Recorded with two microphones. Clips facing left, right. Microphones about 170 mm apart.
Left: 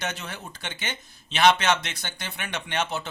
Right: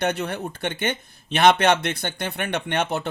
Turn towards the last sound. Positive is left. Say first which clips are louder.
# right 5 dB
turn(degrees=-60)  # may be behind; listen again after turning